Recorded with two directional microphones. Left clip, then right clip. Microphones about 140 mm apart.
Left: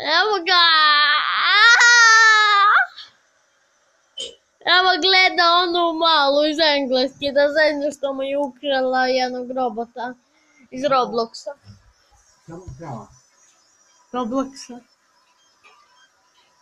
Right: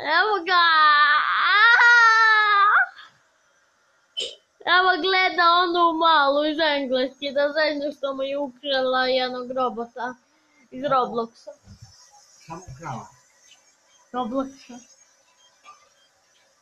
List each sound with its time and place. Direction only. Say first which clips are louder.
0.0 s baby cry: left 2 dB; 15° left (ahead or behind)
4.6 s a sound: left 3 dB; 15° left (ahead or behind)
7.5 s a woman's voice: left 5 dB; 15° left (ahead or behind)
14.1 s speech: left 3 dB; 25° left (ahead or behind)